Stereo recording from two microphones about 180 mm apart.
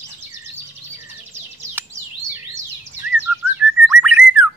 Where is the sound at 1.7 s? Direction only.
15° right (ahead or behind).